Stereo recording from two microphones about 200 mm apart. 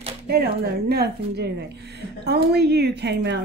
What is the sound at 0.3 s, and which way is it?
A woman's voice, 50° right (ahead or behind).